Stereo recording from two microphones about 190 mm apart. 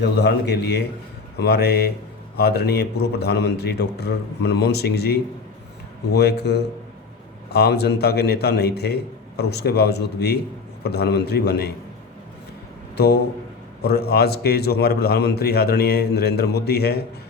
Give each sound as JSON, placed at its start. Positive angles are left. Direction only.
{"t": 0.0, "sound": "a man's voice", "side_deg": 60}
{"t": 13.8, "sound": "a man's voice", "side_deg": 55}